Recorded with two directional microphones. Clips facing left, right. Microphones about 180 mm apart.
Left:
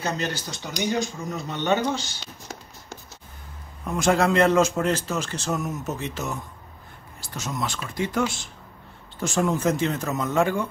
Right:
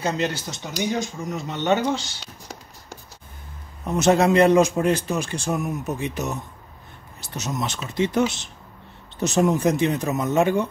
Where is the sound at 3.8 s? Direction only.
25° right (ahead or behind).